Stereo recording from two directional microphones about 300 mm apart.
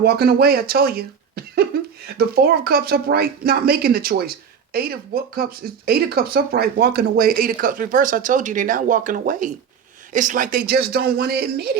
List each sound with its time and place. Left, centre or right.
0.0 s speech: right